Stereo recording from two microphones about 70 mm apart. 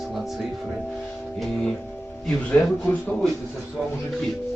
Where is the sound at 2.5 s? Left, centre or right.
Left.